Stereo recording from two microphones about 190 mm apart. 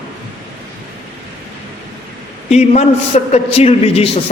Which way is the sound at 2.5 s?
35° left (ahead or behind).